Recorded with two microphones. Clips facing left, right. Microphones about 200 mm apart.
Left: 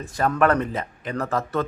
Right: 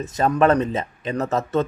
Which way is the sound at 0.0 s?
20° right (ahead or behind).